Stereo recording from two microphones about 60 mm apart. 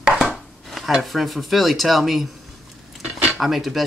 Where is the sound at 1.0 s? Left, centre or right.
Centre.